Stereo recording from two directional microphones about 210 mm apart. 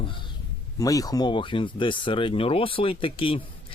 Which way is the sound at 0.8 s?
15° left (ahead or behind).